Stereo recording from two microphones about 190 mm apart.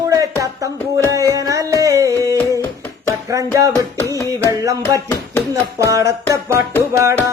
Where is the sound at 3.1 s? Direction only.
15° right (ahead or behind).